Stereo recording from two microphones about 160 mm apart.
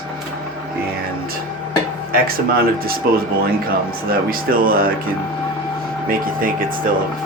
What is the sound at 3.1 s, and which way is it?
Speech, 70° right (ahead or behind).